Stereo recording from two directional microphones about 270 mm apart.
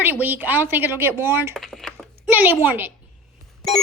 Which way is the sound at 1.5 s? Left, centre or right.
Centre.